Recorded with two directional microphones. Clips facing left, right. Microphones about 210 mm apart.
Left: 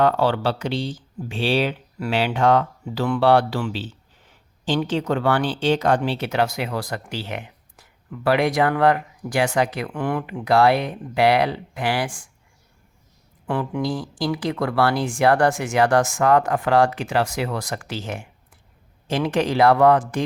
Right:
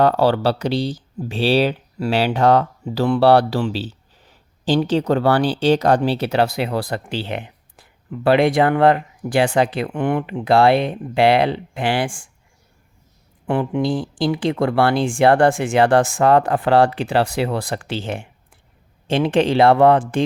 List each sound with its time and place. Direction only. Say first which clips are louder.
0.0 s speech: right 3 dB; 40° right (ahead or behind)
13.5 s speech: right 4 dB; 25° right (ahead or behind)